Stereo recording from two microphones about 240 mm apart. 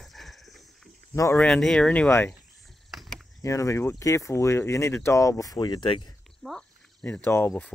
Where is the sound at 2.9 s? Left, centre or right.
Centre.